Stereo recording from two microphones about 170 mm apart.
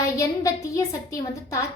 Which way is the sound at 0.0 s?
20° left (ahead or behind).